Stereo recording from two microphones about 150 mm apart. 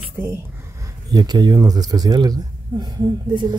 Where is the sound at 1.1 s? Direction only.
25° right (ahead or behind).